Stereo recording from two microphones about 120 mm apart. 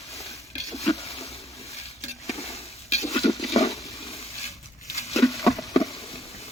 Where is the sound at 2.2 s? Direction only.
60° left (ahead or behind).